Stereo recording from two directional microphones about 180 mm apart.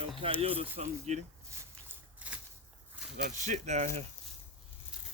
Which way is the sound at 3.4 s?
40° right (ahead or behind).